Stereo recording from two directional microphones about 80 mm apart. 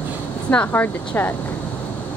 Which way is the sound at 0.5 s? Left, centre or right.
Left.